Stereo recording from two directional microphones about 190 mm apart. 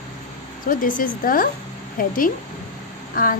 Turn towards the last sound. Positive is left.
turn(degrees=45)  # may be behind; listen again after turning